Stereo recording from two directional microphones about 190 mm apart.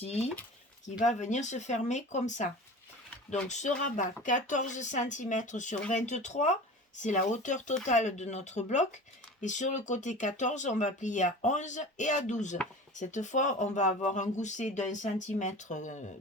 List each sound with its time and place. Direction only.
0.0 s speech: 35° left (ahead or behind)
3.5 s speech: 40° left (ahead or behind)